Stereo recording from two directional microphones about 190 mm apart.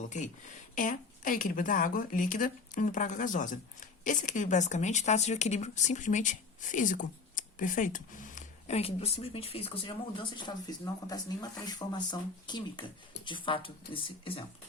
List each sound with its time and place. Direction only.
0.1 s a woman's voice: 40° left (ahead or behind)